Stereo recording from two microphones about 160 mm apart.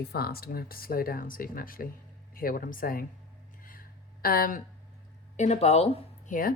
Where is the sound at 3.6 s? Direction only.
60° left (ahead or behind).